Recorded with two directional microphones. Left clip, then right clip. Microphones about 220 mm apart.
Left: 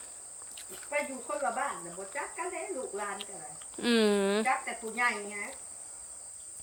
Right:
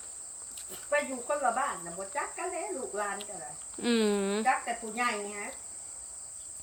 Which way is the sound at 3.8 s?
10° left (ahead or behind).